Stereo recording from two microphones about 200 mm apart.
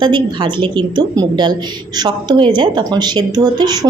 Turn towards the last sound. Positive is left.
turn(degrees=-20)  # may be behind; listen again after turning